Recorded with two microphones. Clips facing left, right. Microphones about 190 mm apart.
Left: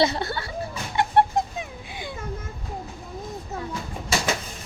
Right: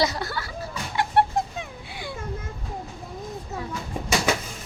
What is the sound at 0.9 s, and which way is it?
Bird, 20° left (ahead or behind).